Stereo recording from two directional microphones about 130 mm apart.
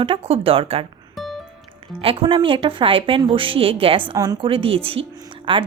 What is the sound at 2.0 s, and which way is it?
A woman's voice, 40° right (ahead or behind).